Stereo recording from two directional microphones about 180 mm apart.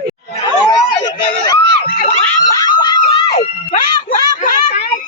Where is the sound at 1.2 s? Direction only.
25° left (ahead or behind).